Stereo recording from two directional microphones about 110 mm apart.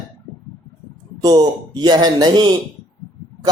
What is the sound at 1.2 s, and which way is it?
Speech, 35° right (ahead or behind).